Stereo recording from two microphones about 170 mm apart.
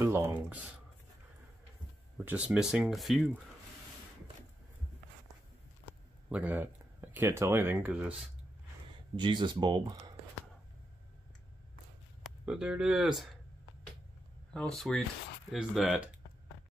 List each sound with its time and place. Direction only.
0.0 s speech: 15° right (ahead or behind)
2.5 s speech: 5° right (ahead or behind)
6.2 s speech: 10° right (ahead or behind)
9.1 s speech: 25° right (ahead or behind)
12.2 s speech: 5° right (ahead or behind)
14.5 s speech: 5° left (ahead or behind)